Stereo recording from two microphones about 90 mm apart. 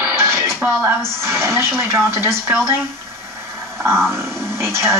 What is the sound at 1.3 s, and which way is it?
Speech, 30° right (ahead or behind).